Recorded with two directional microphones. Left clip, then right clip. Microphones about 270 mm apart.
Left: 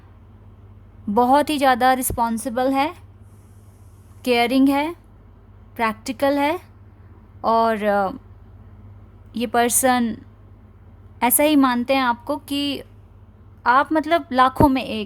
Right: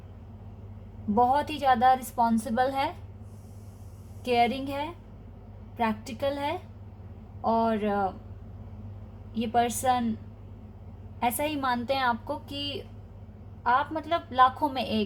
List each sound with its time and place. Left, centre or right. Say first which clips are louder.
1.1 s a woman's voice: left 7 dB; left
2.1 s a woman's voice: left 3 dB; left
4.2 s a woman's voice: left 7 dB; left
9.4 s a woman's voice: left 6 dB; left
11.2 s a woman's voice: left 11 dB; left
11.6 s a woman's voice: left 8 dB; left
12.3 s a woman's voice: left 9 dB; left
14.8 s a woman's voice: left 3 dB; left